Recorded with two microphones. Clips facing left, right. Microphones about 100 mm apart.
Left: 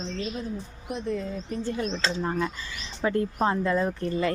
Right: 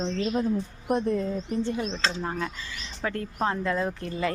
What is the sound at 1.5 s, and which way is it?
Speech, 20° right (ahead or behind).